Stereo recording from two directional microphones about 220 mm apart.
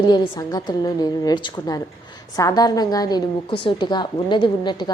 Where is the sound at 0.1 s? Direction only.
20° left (ahead or behind).